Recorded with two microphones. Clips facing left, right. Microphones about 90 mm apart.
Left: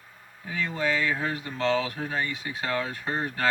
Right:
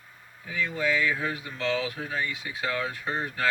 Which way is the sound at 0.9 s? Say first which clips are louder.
Even; 35° left (ahead or behind).